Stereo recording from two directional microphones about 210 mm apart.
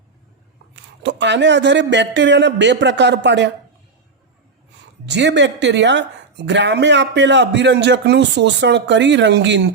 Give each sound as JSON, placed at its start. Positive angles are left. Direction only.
{"t": 0.7, "sound": "speech", "side_deg": -55}
{"t": 5.0, "sound": "speech", "side_deg": -55}